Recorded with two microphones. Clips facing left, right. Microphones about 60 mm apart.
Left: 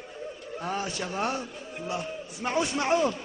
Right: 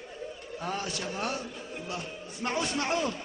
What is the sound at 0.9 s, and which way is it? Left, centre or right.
Speech, left.